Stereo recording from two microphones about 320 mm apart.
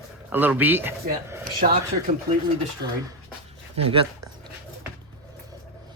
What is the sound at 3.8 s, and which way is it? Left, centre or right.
Speech, centre.